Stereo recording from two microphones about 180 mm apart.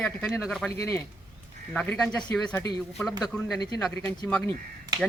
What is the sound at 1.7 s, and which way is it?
Speech, 5° left (ahead or behind).